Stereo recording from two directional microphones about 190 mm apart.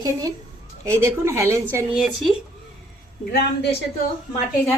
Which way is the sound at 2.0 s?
Centre (ahead or behind).